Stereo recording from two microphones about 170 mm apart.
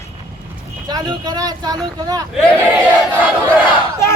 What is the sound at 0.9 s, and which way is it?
Vehicle, 25° right (ahead or behind).